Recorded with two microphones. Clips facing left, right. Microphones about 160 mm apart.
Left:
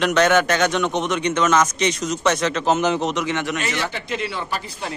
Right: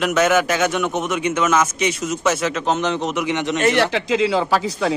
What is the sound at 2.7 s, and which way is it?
Speech, 5° left (ahead or behind).